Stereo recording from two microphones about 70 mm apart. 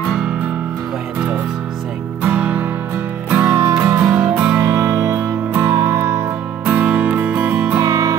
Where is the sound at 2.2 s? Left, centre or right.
Centre.